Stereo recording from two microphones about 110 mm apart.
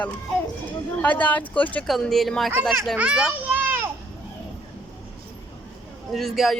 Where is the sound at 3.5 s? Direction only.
20° right (ahead or behind).